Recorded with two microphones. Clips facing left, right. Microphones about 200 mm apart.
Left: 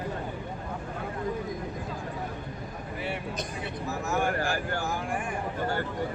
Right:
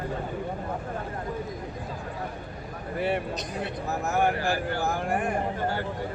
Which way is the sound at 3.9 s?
60° right (ahead or behind).